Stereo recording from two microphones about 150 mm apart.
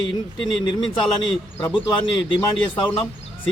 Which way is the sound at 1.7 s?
30° left (ahead or behind).